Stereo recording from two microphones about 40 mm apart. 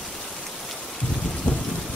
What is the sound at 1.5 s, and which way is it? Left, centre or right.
Rain, left.